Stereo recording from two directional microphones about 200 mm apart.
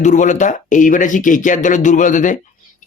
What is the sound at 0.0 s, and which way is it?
Speech, 40° left (ahead or behind).